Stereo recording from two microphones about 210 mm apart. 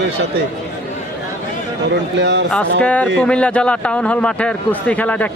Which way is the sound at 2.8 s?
5° left (ahead or behind).